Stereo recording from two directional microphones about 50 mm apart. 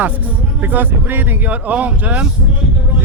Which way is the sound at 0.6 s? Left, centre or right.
Right.